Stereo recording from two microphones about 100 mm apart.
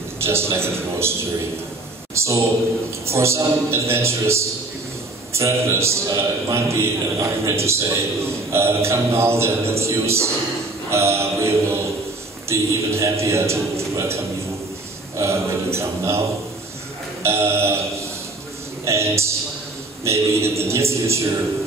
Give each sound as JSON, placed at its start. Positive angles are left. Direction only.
{"t": 0.2, "sound": "a man's voice", "side_deg": -25}
{"t": 2.1, "sound": "mantra", "side_deg": -30}
{"t": 3.1, "sound": "a man's voice", "side_deg": -25}
{"t": 17.2, "sound": "mantra", "side_deg": -25}
{"t": 18.9, "sound": "a man's voice", "side_deg": -25}